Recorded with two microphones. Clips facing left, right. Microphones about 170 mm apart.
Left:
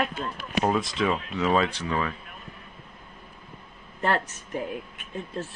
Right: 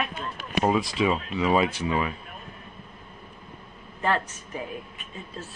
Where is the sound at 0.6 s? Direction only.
5° right (ahead or behind).